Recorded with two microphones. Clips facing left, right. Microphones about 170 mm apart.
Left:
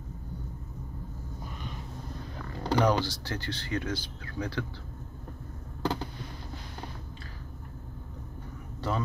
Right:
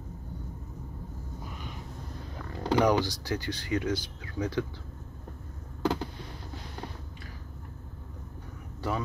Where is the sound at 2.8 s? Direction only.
15° right (ahead or behind).